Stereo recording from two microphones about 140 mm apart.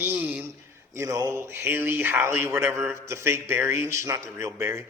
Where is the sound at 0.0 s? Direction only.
10° right (ahead or behind).